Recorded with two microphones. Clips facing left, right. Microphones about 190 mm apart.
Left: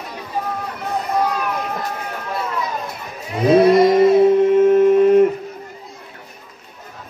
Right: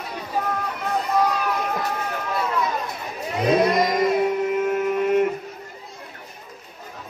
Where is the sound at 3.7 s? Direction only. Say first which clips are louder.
Left 8 dB; 30° left (ahead or behind).